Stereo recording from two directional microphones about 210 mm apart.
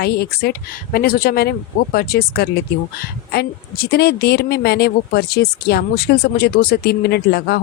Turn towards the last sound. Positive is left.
turn(degrees=50)  # may be behind; listen again after turning